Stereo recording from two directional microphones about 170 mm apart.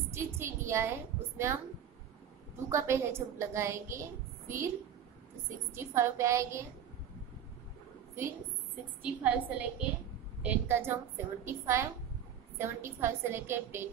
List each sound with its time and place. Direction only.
0.1 s a woman's voice: 15° right (ahead or behind)
2.7 s a woman's voice: 15° right (ahead or behind)
5.9 s a woman's voice: 15° right (ahead or behind)
9.0 s a woman's voice: 10° right (ahead or behind)